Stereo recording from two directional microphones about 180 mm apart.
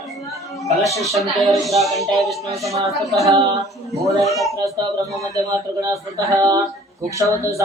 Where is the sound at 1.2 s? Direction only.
Centre (ahead or behind).